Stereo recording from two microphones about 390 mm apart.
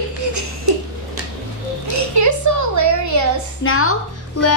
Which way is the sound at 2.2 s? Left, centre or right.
Right.